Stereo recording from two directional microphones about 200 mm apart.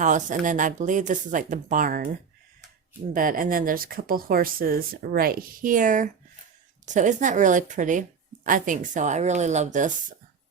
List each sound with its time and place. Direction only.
0.0 s speech: 40° right (ahead or behind)
3.1 s speech: 45° right (ahead or behind)